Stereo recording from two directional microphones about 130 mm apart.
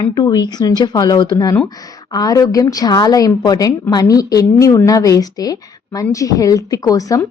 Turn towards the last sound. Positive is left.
turn(degrees=25)  # may be behind; listen again after turning